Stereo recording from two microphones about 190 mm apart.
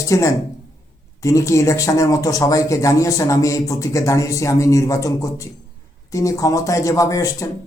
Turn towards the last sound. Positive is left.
turn(degrees=15)  # may be behind; listen again after turning